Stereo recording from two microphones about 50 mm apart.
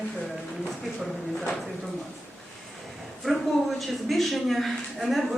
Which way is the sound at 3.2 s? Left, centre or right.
Centre.